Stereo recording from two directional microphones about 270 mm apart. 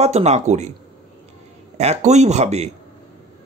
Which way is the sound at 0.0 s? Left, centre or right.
Right.